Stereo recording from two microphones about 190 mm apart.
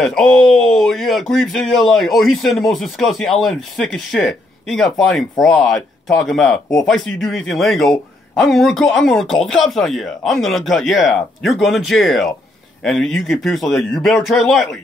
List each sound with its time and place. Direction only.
0.0 s a man's voice: centre (ahead or behind)